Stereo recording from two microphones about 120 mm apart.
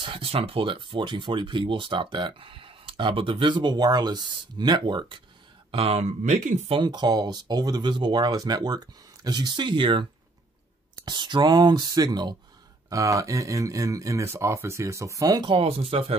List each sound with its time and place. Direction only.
0.0 s speech: 50° right (ahead or behind)
5.7 s speech: 55° right (ahead or behind); by 6.7 s 75° right (ahead or behind)
6.7 s speech: 40° right (ahead or behind)
11.1 s speech: 40° right (ahead or behind)
15.5 s speech: 55° right (ahead or behind)